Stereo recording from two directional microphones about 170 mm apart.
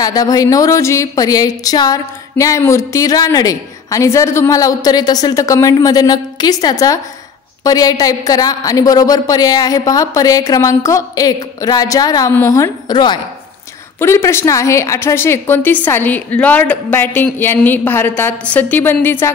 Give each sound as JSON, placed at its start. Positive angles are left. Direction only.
{"t": 0.0, "sound": "speech", "side_deg": 20}
{"t": 13.9, "sound": "a woman's voice", "side_deg": 15}